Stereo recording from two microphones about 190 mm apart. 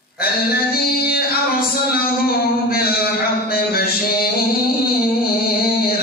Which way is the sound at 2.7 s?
55° left (ahead or behind).